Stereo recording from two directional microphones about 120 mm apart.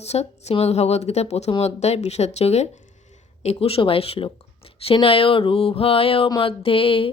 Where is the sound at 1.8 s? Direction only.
65° left (ahead or behind).